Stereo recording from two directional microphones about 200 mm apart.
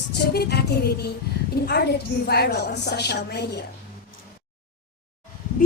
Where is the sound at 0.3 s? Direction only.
55° left (ahead or behind).